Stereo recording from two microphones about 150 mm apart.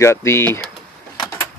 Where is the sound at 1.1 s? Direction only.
25° left (ahead or behind).